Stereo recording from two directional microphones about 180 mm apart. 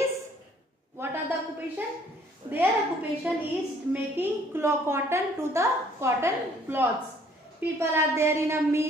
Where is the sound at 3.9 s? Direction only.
10° right (ahead or behind).